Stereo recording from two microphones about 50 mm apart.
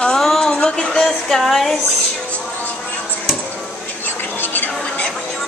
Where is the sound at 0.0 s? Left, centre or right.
Centre.